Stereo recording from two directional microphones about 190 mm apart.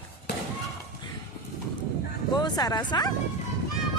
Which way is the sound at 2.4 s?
20° left (ahead or behind).